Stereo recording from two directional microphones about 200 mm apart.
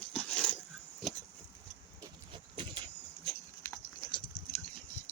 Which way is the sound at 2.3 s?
25° right (ahead or behind).